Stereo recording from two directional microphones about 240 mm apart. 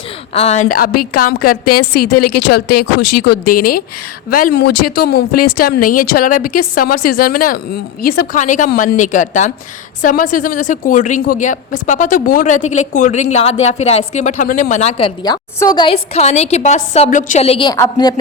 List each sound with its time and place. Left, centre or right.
0.3 s a woman's voice: left
1.4 s a woman's voice: left
4.3 s a woman's voice: left; by 18.1 s centre